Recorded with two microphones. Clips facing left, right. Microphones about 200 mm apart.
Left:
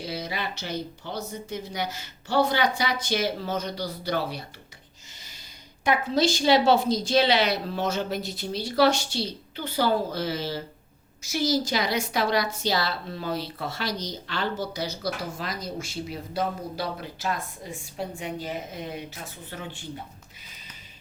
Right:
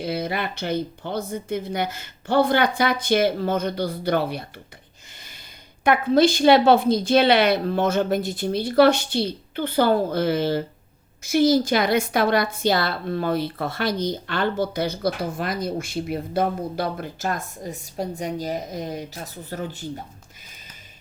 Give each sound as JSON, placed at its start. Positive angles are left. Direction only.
{"t": 0.0, "sound": "a woman's voice", "side_deg": -55}
{"t": 5.8, "sound": "a woman's voice", "side_deg": -55}